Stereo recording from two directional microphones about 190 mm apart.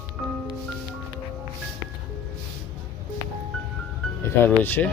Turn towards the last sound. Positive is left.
turn(degrees=10)  # may be behind; listen again after turning